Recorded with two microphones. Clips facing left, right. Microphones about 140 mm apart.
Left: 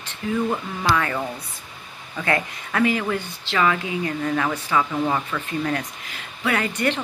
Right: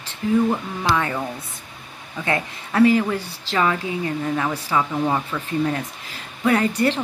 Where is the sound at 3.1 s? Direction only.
35° right (ahead or behind).